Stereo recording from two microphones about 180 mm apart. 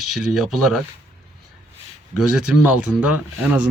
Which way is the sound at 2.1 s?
5° right (ahead or behind).